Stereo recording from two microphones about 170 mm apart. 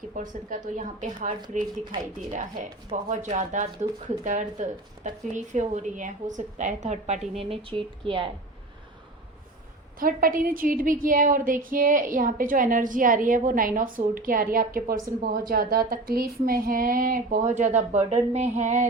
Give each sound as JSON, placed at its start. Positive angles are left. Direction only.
{"t": 0.1, "sound": "a woman's voice", "side_deg": -50}
{"t": 2.9, "sound": "a woman's voice", "side_deg": -45}
{"t": 7.3, "sound": "speech", "side_deg": -35}
{"t": 10.0, "sound": "a woman's voice", "side_deg": -55}